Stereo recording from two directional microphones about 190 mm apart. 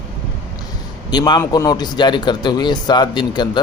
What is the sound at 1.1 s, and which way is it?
Speech, 20° left (ahead or behind).